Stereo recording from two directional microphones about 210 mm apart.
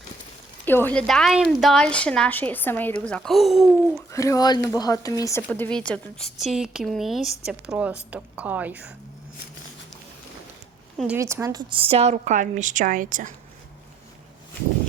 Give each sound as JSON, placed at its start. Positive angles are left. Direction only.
{"t": 0.6, "sound": "a woman's voice", "side_deg": 10}
{"t": 4.1, "sound": "a woman's voice", "side_deg": 15}
{"t": 10.9, "sound": "a woman's voice", "side_deg": -5}